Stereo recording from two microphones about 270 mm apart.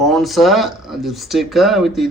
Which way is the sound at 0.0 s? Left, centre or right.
Centre.